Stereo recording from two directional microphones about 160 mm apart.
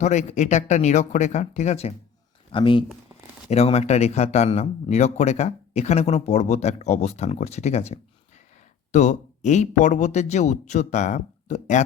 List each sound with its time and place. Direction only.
0.0 s a man's voice: 45° left (ahead or behind)